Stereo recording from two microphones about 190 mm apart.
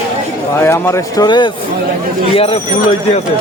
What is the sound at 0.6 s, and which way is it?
Speech, 15° left (ahead or behind).